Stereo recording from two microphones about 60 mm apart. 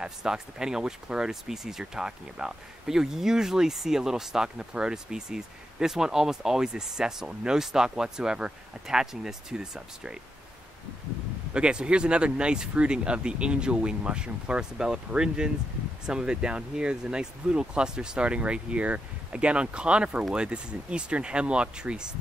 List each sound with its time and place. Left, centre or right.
0.0 s speech: centre
11.5 s speech: centre